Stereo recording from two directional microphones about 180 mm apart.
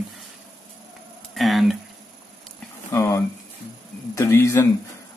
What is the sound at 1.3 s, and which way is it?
Speech, centre (ahead or behind).